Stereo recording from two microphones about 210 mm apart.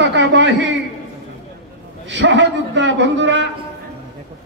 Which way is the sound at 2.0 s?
60° right (ahead or behind).